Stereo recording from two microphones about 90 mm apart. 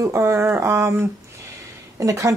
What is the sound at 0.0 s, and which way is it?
Speech, 30° right (ahead or behind).